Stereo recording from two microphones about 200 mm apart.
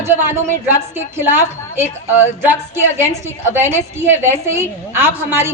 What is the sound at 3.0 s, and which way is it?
A woman's voice, 10° right (ahead or behind).